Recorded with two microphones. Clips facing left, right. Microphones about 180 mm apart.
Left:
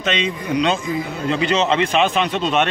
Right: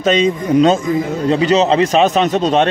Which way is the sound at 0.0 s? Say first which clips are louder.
Right 8 dB; 40° right (ahead or behind).